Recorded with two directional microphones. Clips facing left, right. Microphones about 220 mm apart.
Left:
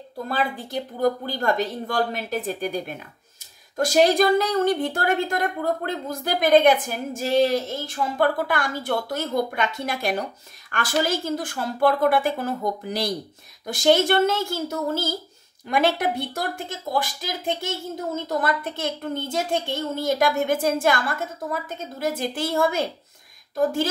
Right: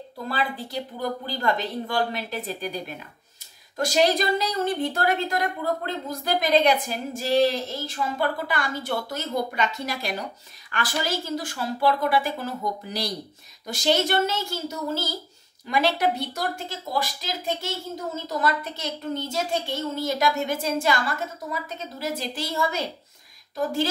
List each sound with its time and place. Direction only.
0.3 s a woman's voice: 45° left (ahead or behind)